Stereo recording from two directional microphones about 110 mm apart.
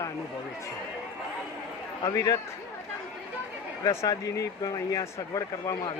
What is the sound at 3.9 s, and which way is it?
Speech, 30° left (ahead or behind).